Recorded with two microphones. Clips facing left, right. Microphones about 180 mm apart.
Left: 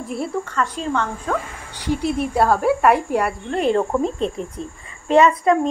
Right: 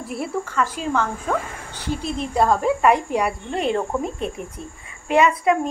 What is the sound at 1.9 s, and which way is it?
Speech, 15° left (ahead or behind).